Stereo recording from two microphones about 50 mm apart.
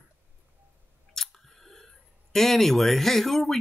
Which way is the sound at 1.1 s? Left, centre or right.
Centre.